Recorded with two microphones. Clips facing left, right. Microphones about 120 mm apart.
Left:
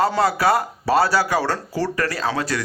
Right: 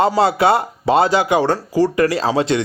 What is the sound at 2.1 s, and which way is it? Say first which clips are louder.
Speech: right 7 dB; 25° right (ahead or behind).